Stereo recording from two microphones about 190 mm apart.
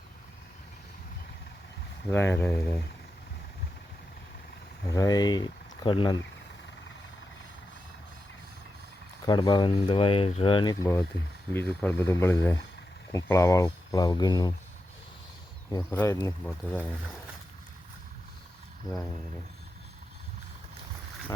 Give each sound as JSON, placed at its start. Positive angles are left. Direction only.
{"t": 2.0, "sound": "speech", "side_deg": 10}
{"t": 4.9, "sound": "speech", "side_deg": 20}
{"t": 9.2, "sound": "speech", "side_deg": 20}
{"t": 11.5, "sound": "speech", "side_deg": 5}
{"t": 15.7, "sound": "speech", "side_deg": 15}